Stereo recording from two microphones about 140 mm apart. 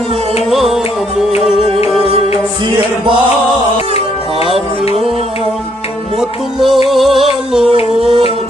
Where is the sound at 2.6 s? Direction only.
35° right (ahead or behind).